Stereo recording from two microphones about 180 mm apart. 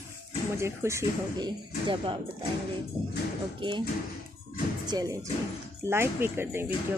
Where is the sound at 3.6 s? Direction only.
25° right (ahead or behind).